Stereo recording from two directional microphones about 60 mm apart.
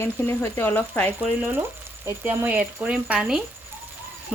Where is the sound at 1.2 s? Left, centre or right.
Right.